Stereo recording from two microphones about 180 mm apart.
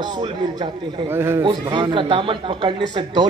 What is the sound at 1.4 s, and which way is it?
A man's voice, 25° right (ahead or behind).